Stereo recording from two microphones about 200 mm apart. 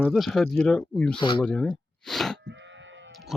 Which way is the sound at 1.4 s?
5° left (ahead or behind).